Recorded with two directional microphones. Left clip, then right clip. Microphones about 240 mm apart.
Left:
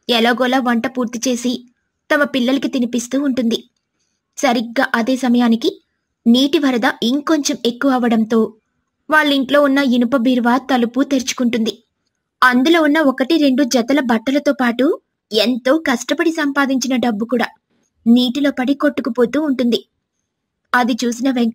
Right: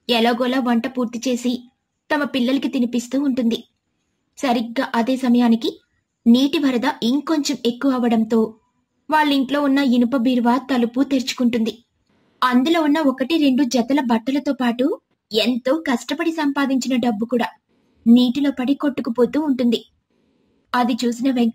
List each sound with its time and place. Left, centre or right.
0.0 s speech: left